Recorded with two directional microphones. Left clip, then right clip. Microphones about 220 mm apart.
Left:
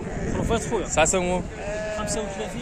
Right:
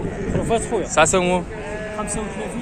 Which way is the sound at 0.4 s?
40° left (ahead or behind).